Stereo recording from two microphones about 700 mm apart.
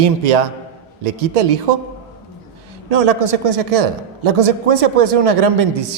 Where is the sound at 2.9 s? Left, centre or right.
Right.